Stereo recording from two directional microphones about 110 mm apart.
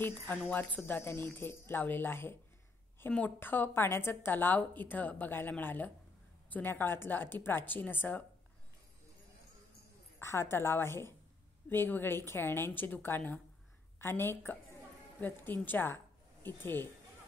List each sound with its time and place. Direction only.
0.0 s a woman's voice: 15° left (ahead or behind)
10.1 s a woman's voice: 25° left (ahead or behind)